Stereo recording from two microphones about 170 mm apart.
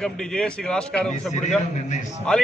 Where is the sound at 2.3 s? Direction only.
5° left (ahead or behind).